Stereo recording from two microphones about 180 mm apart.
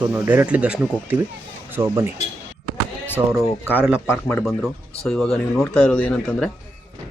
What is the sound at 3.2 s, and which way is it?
Speech, 20° right (ahead or behind).